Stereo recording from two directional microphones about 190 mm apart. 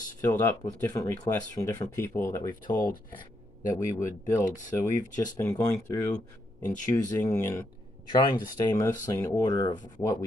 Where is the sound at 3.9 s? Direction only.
15° left (ahead or behind).